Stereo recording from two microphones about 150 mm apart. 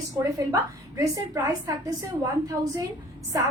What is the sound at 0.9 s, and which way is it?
A woman's voice, 20° right (ahead or behind).